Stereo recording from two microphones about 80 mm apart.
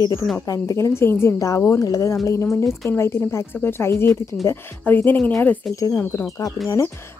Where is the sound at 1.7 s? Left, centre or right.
Left.